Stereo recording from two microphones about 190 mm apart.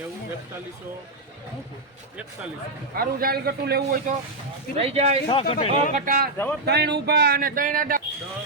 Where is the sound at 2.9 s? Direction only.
50° right (ahead or behind).